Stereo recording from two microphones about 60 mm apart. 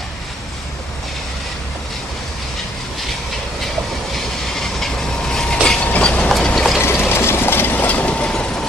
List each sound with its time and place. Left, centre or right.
4.1 s train: centre
5.9 s train: left
6.5 s ratchet: centre
6.8 s train: left; by 8.6 s centre